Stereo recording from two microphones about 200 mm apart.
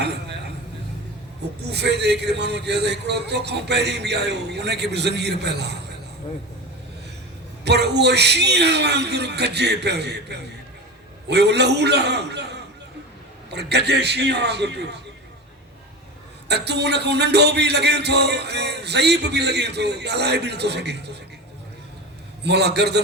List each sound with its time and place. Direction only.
0.0 s a sound: 55° right (ahead or behind)
1.7 s music: 55° right (ahead or behind)
7.6 s music: 55° right (ahead or behind)
16.5 s music: 55° right (ahead or behind)
22.4 s music: 55° right (ahead or behind)